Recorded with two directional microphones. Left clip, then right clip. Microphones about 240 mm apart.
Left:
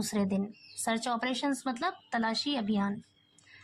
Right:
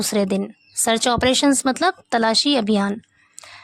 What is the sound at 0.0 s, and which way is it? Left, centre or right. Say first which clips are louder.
Speech: right 12 dB; right.